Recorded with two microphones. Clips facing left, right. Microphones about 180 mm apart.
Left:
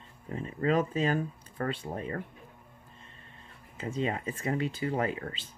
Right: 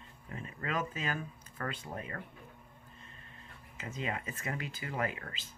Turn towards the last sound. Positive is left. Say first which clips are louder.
# left 5 dB
turn(degrees=30)  # may be behind; listen again after turning